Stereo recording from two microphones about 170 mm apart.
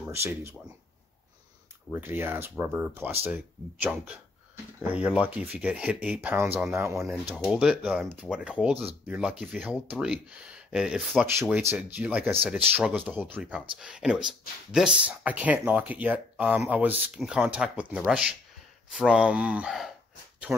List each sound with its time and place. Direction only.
0.1 s speech: 15° right (ahead or behind)
1.9 s speech: 10° right (ahead or behind)